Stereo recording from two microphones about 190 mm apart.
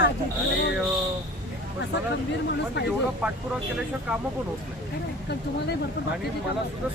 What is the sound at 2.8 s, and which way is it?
Speech, 65° left (ahead or behind).